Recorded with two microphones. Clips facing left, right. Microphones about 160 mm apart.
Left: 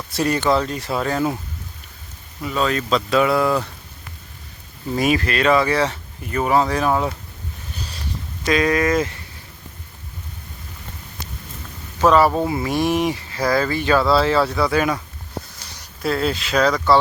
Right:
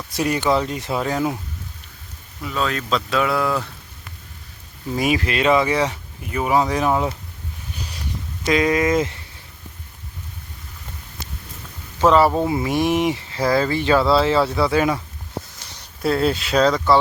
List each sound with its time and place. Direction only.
0.1 s speech: 10° right (ahead or behind)
2.4 s speech: centre (ahead or behind)
4.9 s speech: 15° right (ahead or behind)
8.4 s speech: 20° right (ahead or behind)
11.9 s speech: 25° right (ahead or behind)